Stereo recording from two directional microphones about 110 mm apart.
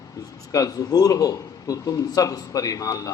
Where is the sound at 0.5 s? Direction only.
30° left (ahead or behind).